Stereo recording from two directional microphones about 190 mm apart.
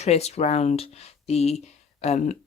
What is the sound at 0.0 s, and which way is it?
Speech, 35° left (ahead or behind).